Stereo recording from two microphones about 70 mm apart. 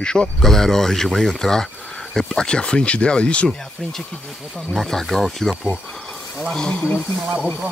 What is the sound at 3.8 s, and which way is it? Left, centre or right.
Speech, centre.